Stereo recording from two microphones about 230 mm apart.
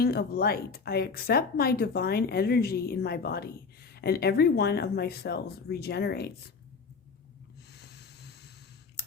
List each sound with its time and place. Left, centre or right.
0.0 s speech: left
7.7 s boat: left